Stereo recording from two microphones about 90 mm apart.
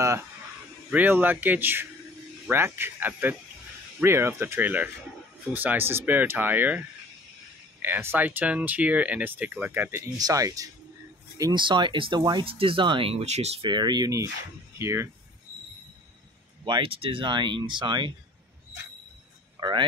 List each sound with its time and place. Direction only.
0.0 s speech: 35° right (ahead or behind)
0.9 s speech: 20° right (ahead or behind)
10.1 s speech: 40° right (ahead or behind)
11.5 s speech: 65° right (ahead or behind)
12.4 s speech: 85° right
13.7 s speech: 50° right (ahead or behind); by 15.0 s 30° right (ahead or behind)
16.6 s speech: 70° right (ahead or behind)
19.6 s a sound: 60° right (ahead or behind)